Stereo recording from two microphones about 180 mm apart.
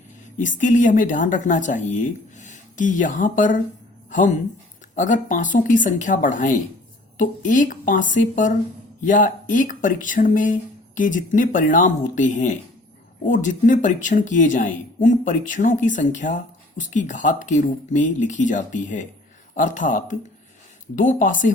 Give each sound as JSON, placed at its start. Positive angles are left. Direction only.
{"t": 0.6, "sound": "speech", "side_deg": 45}
{"t": 4.9, "sound": "speech", "side_deg": 45}